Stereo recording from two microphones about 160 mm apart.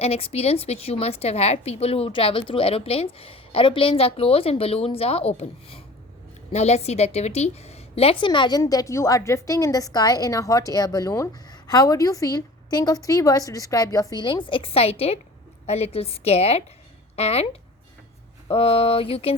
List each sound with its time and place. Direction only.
0.0 s a woman's voice: 40° left (ahead or behind)